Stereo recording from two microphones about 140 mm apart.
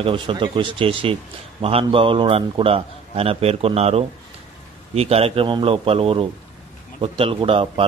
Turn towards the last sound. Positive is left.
turn(degrees=-40)  # may be behind; listen again after turning